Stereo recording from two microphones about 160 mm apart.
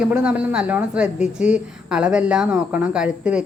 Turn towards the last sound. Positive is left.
turn(degrees=-5)  # may be behind; listen again after turning